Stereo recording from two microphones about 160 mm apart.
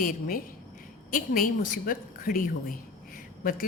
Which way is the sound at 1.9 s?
65° left (ahead or behind).